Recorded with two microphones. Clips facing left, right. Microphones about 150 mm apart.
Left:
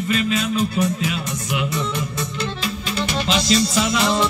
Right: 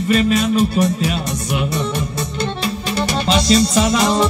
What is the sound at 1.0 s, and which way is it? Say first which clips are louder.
Music: right 4 dB; 35° right (ahead or behind).